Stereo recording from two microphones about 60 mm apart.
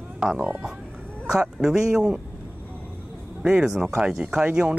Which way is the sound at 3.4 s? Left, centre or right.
Centre.